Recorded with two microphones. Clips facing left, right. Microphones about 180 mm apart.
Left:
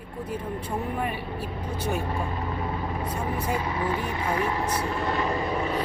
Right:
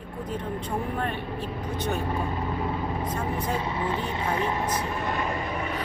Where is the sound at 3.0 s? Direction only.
10° left (ahead or behind).